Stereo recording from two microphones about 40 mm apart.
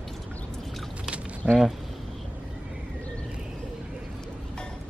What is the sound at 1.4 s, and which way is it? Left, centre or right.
Speech, centre.